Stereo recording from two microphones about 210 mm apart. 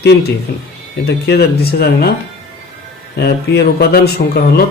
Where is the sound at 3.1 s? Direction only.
50° left (ahead or behind).